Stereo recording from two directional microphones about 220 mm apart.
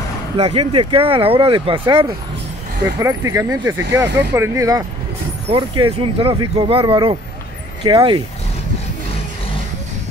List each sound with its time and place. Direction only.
0.4 s speech: 25° right (ahead or behind)